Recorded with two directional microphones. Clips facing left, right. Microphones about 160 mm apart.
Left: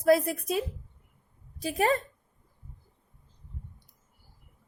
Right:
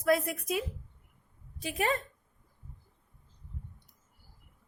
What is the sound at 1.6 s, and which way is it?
Speech, 35° left (ahead or behind).